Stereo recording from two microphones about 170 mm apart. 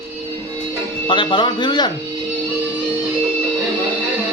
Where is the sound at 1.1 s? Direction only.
30° left (ahead or behind).